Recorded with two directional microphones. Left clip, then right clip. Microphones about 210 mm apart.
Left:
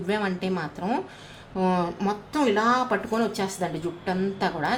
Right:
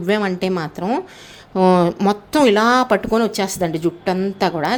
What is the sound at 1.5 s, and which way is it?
Speech, 45° right (ahead or behind).